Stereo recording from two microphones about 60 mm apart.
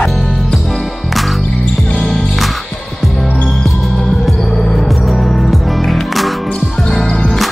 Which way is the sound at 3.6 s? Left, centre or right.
Centre.